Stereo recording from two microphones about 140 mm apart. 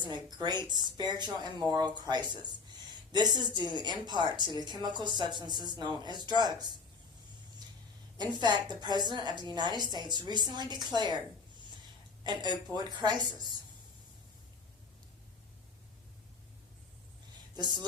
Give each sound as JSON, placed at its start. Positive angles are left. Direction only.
{"t": 0.0, "sound": "speech", "side_deg": -30}
{"t": 8.2, "sound": "speech", "side_deg": -30}
{"t": 12.2, "sound": "speech", "side_deg": -30}